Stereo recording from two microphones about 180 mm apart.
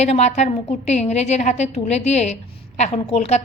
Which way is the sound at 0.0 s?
35° left (ahead or behind).